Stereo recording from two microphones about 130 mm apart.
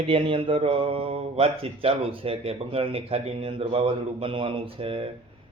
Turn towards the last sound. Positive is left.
turn(degrees=-45)  # may be behind; listen again after turning